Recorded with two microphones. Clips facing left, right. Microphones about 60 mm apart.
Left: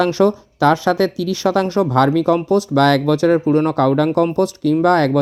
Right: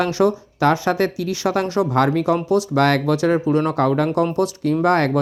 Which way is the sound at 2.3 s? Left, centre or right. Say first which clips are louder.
Left 3 dB; left.